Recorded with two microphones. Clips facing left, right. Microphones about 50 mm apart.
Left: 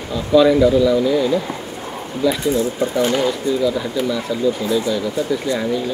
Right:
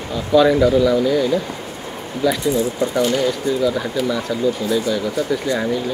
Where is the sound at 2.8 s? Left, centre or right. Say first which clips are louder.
Even; left.